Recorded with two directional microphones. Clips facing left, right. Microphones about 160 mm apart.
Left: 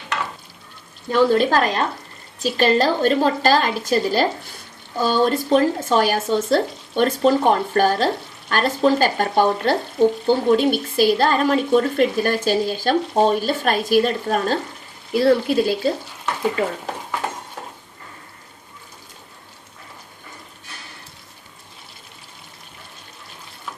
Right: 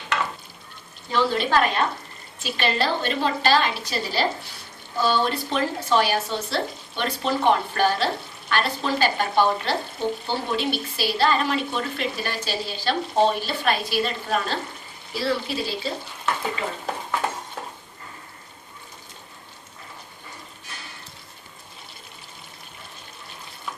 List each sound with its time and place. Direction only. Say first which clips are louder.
1.1 s a woman's voice: left 5 dB; 50° left (ahead or behind)